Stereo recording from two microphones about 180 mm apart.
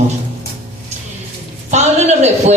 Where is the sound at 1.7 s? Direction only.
40° right (ahead or behind).